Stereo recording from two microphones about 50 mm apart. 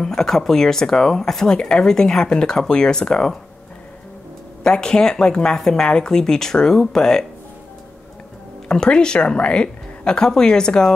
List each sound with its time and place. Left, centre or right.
0.0 s speech: centre
4.6 s speech: centre
8.6 s speech: centre